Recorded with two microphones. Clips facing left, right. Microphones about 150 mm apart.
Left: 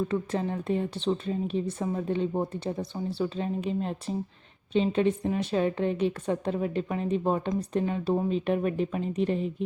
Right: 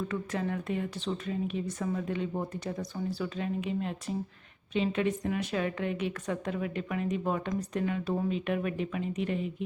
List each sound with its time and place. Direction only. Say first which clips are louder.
0.1 s a woman's voice: left 4 dB; 30° left (ahead or behind)